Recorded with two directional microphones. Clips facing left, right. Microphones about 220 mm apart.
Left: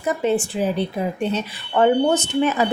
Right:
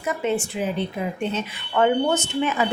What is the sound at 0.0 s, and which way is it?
Speech, 35° left (ahead or behind).